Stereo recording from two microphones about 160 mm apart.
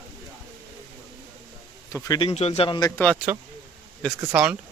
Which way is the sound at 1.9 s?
20° left (ahead or behind).